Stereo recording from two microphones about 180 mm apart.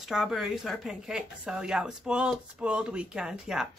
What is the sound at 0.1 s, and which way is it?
Speech, centre (ahead or behind).